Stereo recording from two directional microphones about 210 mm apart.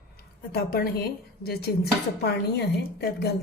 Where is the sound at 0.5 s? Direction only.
45° left (ahead or behind).